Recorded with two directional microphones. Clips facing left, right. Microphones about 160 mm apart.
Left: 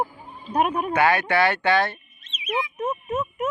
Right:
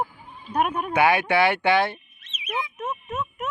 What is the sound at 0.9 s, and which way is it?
Speech, 10° right (ahead or behind).